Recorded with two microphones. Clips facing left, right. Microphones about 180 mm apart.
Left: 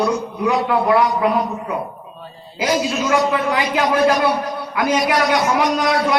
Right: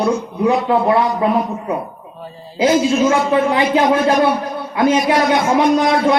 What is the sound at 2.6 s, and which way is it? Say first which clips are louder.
A man's voice: right 6 dB; 25° right (ahead or behind).